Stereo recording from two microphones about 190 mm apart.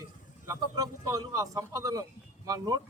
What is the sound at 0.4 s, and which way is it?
A man's voice, 15° right (ahead or behind).